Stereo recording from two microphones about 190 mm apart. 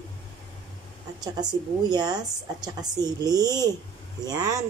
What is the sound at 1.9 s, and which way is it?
Speech, 20° right (ahead or behind).